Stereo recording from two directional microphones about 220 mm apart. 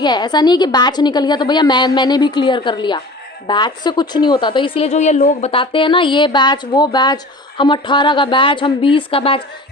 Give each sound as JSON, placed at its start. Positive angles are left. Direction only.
{"t": 0.0, "sound": "a woman's voice", "side_deg": 20}